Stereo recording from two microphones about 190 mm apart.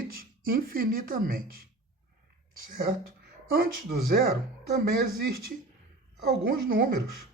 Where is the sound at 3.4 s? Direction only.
50° right (ahead or behind).